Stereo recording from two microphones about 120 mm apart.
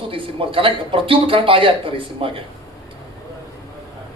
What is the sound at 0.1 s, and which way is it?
Speech, 50° right (ahead or behind).